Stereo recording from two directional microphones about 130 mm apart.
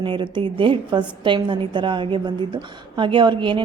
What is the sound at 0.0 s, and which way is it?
A woman's voice, 40° right (ahead or behind).